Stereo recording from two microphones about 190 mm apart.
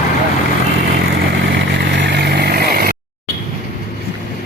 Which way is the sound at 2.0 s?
65° right (ahead or behind).